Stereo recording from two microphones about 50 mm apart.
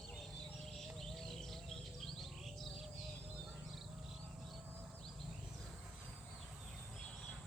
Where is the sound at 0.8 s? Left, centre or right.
Centre.